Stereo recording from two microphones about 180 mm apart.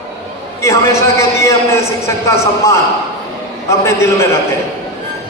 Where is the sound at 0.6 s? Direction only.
15° left (ahead or behind).